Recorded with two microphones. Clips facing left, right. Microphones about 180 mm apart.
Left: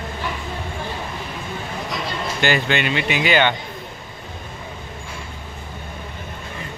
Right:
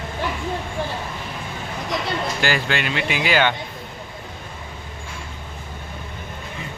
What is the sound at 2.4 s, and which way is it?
Speech, centre (ahead or behind).